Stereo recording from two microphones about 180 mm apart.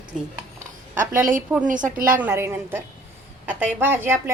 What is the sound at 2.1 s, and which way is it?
A woman's voice, 15° right (ahead or behind).